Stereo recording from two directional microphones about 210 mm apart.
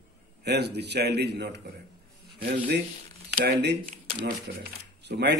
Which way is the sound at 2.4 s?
50° right (ahead or behind).